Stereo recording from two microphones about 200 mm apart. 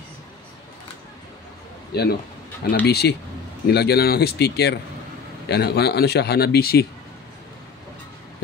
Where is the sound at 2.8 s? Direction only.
55° left (ahead or behind).